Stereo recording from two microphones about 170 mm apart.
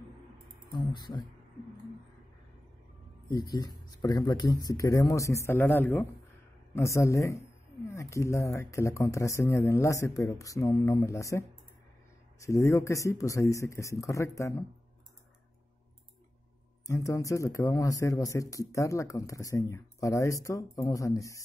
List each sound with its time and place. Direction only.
0.7 s speech: 25° left (ahead or behind)
3.3 s speech: 20° left (ahead or behind)
16.8 s speech: 20° left (ahead or behind)